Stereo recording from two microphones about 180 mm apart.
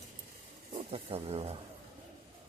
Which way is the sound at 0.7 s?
35° right (ahead or behind).